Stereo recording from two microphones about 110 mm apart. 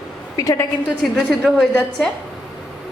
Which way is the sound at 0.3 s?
30° left (ahead or behind).